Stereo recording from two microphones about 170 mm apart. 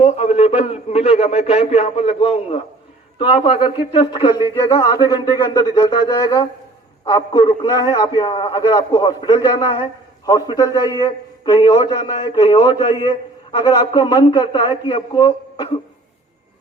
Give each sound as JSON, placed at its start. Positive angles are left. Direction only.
{"t": 0.0, "sound": "a man's voice", "side_deg": 35}